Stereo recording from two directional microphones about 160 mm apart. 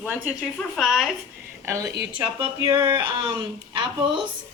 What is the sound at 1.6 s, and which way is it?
Speech, 15° right (ahead or behind).